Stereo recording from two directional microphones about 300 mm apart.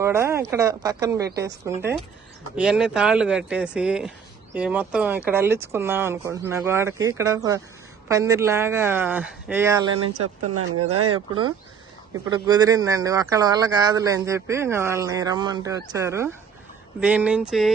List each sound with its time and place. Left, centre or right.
0.0 s speech: centre
10.1 s speech: right
12.3 s speech: centre